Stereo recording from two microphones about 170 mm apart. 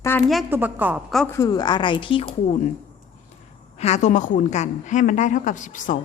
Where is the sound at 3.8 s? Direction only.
40° left (ahead or behind).